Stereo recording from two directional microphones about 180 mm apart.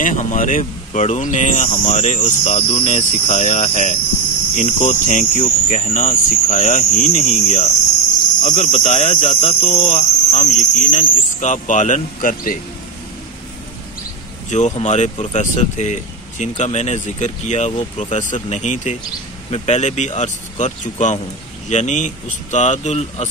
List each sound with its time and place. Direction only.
0.0 s speech: 45° left (ahead or behind)
14.5 s speech: 40° left (ahead or behind)